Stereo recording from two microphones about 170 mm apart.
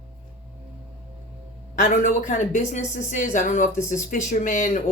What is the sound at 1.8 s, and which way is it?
Speech, 50° left (ahead or behind).